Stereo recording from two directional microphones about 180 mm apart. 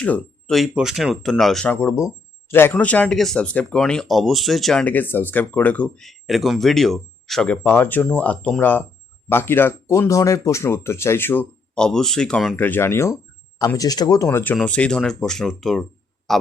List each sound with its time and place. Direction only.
0.0 s speech: 5° left (ahead or behind)